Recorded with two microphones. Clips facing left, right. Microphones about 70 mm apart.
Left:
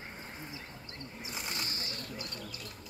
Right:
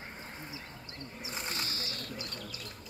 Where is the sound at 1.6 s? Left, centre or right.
Left.